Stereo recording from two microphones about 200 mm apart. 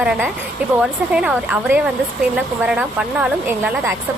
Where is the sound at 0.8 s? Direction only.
5° right (ahead or behind).